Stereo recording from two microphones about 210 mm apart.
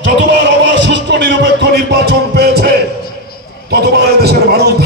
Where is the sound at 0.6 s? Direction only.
60° right (ahead or behind).